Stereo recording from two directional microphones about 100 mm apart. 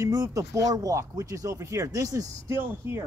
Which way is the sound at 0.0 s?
35° right (ahead or behind).